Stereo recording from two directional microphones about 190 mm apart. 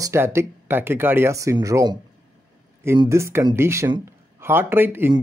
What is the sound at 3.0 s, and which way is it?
Speech, 15° right (ahead or behind).